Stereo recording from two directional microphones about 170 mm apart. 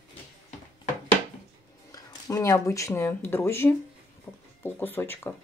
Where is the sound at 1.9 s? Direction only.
20° left (ahead or behind).